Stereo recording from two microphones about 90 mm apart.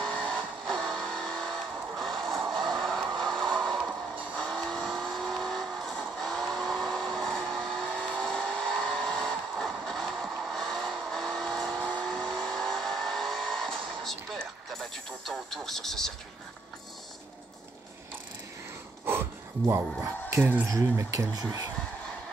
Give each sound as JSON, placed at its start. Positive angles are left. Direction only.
{"t": 0.0, "sound": "vehicle", "side_deg": 10}
{"t": 2.5, "sound": "a sound", "side_deg": 5}
{"t": 3.8, "sound": "music", "side_deg": -15}
{"t": 4.4, "sound": "vehicle", "side_deg": 5}
{"t": 19.7, "sound": "speech", "side_deg": -30}